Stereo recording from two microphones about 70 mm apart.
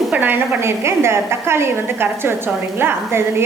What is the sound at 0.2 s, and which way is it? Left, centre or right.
A woman's voice, right.